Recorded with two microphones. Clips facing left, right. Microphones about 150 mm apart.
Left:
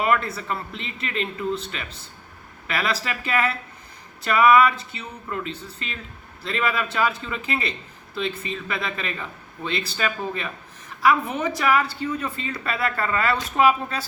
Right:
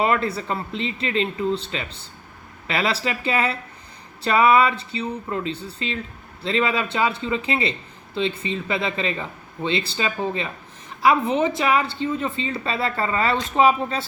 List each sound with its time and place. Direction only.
0.0 s speech: 30° right (ahead or behind)